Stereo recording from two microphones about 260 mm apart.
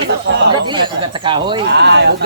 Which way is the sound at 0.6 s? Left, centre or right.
Centre.